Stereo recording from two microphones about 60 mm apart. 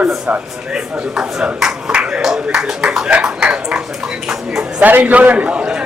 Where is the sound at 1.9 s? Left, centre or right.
Centre.